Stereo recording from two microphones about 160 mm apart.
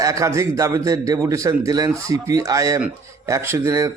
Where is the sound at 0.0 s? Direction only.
20° right (ahead or behind).